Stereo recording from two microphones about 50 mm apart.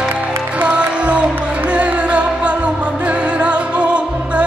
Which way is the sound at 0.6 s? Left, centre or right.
Right.